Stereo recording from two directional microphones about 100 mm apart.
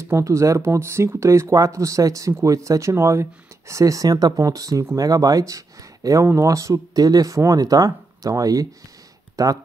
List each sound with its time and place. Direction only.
0.0 s speech: 30° right (ahead or behind)